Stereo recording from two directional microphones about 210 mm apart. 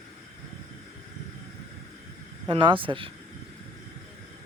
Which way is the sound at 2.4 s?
25° right (ahead or behind).